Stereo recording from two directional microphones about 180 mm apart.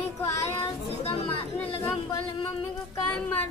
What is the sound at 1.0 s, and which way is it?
Chatter, 35° left (ahead or behind).